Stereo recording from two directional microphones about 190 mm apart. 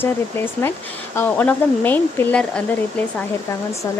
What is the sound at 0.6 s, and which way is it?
Speech, 10° left (ahead or behind).